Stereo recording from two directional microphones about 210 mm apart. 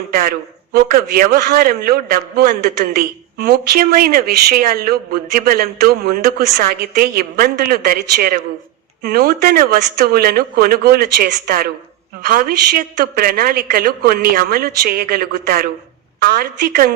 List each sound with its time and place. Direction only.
0.1 s a man's voice: 45° right (ahead or behind)